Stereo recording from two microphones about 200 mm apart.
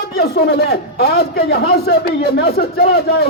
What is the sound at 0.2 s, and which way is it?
A man's voice, 50° left (ahead or behind).